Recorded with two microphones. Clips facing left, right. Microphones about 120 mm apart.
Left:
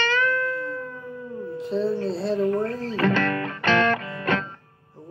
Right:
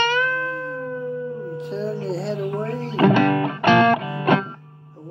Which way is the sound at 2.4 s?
15° right (ahead or behind).